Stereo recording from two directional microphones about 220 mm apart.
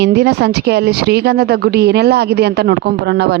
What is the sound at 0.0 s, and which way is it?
Speech, 50° right (ahead or behind).